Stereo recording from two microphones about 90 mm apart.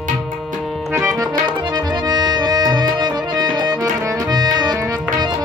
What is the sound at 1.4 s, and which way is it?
Accordion, 50° right (ahead or behind).